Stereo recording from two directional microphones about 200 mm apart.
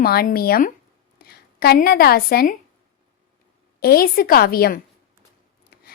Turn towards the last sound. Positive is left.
turn(degrees=50)  # may be behind; listen again after turning